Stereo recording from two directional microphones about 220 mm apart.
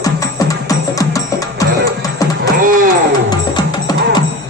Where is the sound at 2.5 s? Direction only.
40° right (ahead or behind).